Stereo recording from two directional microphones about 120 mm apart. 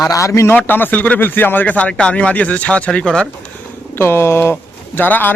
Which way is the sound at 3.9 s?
20° left (ahead or behind).